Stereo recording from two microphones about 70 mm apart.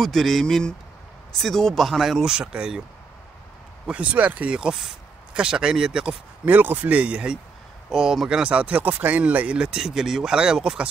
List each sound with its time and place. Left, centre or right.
0.0 s speech: centre
3.8 s speech: centre
6.4 s speech: right; by 10.9 s centre